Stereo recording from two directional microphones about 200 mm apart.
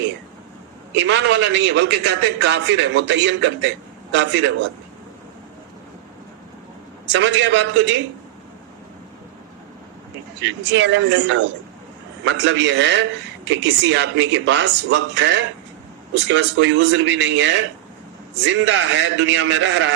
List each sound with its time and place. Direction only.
0.9 s a man's voice: 60° right (ahead or behind)
7.1 s a man's voice: 60° right (ahead or behind)
10.4 s a man's voice: 60° right (ahead or behind)